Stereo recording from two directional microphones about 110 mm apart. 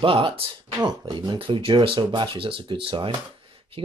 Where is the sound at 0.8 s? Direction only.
40° right (ahead or behind).